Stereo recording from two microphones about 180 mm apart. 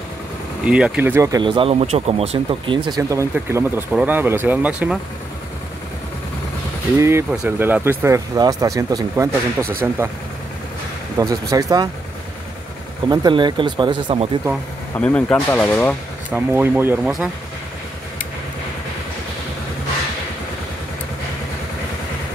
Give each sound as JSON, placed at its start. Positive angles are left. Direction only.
{"t": 0.7, "sound": "speech", "side_deg": -5}
{"t": 3.0, "sound": "speech", "side_deg": -15}
{"t": 7.0, "sound": "speech", "side_deg": -15}
{"t": 11.1, "sound": "speech", "side_deg": -20}
{"t": 13.1, "sound": "speech", "side_deg": -25}
{"t": 15.0, "sound": "speech", "side_deg": 5}
{"t": 16.3, "sound": "speech", "side_deg": -10}